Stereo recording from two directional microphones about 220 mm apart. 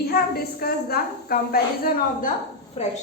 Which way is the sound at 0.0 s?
45° left (ahead or behind).